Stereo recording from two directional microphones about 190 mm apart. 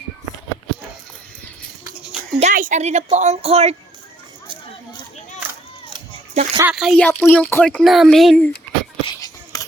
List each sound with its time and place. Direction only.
2.4 s a woman's voice: 45° right (ahead or behind)
6.3 s speech: 40° right (ahead or behind)
6.7 s speech: centre (ahead or behind)
7.1 s speech: 10° left (ahead or behind)
9.0 s a sound: 20° left (ahead or behind)